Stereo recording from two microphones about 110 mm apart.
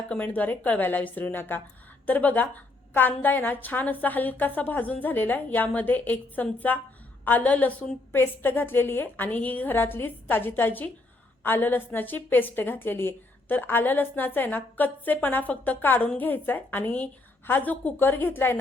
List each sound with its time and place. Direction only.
0.1 s a woman's voice: 15° left (ahead or behind)